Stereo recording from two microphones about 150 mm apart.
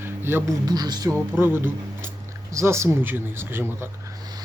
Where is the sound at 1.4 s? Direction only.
15° right (ahead or behind).